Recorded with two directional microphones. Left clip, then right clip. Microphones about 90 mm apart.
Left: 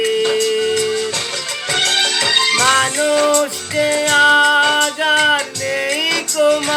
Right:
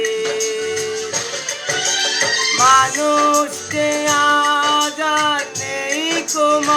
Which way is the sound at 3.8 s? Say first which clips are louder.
Left 3 dB; 20° right (ahead or behind).